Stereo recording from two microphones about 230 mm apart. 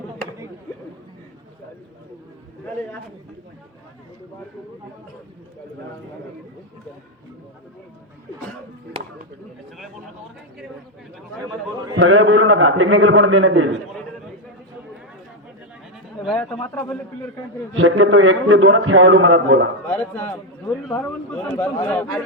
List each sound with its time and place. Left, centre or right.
11.9 s a man's voice: right
16.2 s a man's voice: centre
17.7 s a man's voice: right
19.9 s a man's voice: centre